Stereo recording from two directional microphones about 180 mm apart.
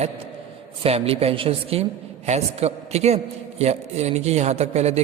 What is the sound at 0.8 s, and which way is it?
Speech, 35° right (ahead or behind).